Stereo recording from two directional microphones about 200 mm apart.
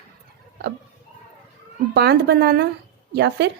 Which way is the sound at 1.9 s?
55° right (ahead or behind).